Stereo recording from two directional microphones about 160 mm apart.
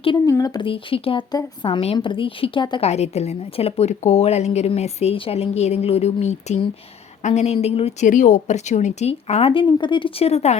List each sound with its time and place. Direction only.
0.3 s a woman's voice: 20° left (ahead or behind)
2.8 s a woman's voice: 40° left (ahead or behind)